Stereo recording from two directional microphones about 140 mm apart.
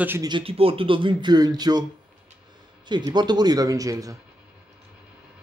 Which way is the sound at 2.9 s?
30° right (ahead or behind).